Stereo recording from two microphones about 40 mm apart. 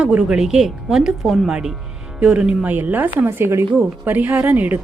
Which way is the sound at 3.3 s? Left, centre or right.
Right.